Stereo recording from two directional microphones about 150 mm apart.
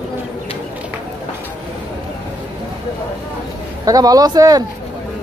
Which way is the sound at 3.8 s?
25° right (ahead or behind).